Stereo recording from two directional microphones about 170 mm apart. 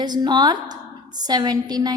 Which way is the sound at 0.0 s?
25° right (ahead or behind).